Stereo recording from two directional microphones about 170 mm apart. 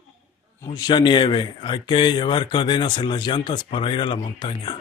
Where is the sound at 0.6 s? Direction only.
25° left (ahead or behind).